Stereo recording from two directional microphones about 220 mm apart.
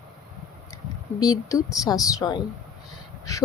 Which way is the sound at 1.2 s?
15° left (ahead or behind).